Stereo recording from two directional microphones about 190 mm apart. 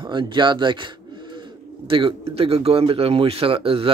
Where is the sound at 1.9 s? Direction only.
30° right (ahead or behind).